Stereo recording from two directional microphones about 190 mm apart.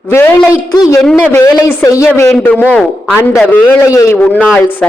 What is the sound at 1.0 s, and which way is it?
A man's voice, 10° left (ahead or behind).